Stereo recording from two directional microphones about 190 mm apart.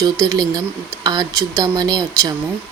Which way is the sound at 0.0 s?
20° right (ahead or behind).